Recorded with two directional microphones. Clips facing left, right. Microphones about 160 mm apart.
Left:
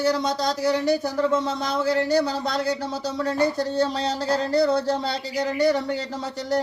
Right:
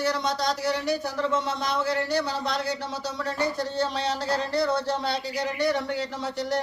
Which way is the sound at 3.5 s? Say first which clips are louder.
Left 4 dB; 40° left (ahead or behind).